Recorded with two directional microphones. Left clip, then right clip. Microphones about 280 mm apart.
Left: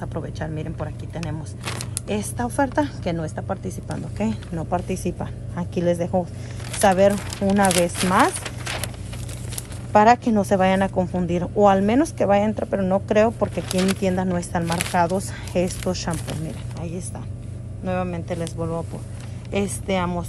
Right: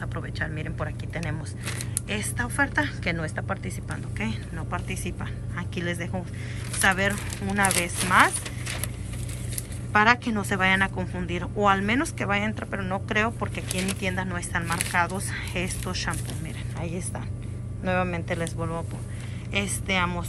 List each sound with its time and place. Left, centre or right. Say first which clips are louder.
0.0 s speech: left 2 dB; centre
1.2 s speech: left 3 dB; centre
2.0 s speech: left 4 dB; left
7.3 s speech: left 6 dB; centre
9.9 s speech: left 5 dB; left
13.7 s speech: left 5 dB; centre
14.0 s speech: left 6 dB; left
17.8 s speech: even; centre